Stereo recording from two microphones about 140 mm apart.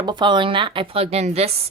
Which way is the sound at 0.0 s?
30° right (ahead or behind).